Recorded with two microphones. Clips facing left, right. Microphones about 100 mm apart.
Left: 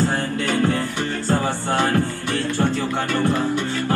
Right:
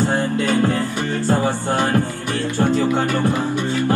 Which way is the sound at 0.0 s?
20° right (ahead or behind).